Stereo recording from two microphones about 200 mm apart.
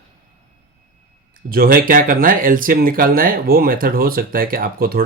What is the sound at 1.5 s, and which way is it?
Speech, 45° right (ahead or behind).